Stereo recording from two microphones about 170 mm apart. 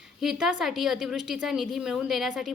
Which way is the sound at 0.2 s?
Centre (ahead or behind).